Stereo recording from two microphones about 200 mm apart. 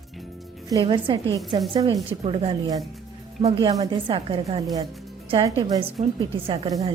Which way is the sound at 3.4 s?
25° right (ahead or behind).